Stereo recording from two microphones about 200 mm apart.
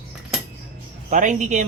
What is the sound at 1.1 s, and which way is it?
Speech, 40° right (ahead or behind).